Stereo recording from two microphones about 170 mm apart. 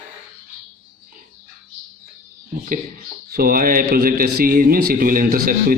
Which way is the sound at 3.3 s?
60° right (ahead or behind).